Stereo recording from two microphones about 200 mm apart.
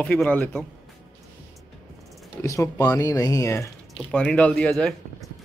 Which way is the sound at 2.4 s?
15° left (ahead or behind).